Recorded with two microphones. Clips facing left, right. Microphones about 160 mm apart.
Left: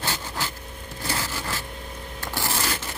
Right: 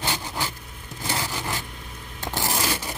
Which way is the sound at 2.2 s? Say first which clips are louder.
Right 2 dB; 20° right (ahead or behind).